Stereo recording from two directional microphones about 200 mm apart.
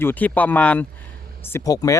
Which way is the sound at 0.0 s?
10° left (ahead or behind).